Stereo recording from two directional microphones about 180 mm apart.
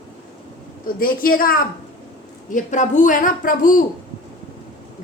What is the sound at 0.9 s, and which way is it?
A woman's voice, 55° left (ahead or behind).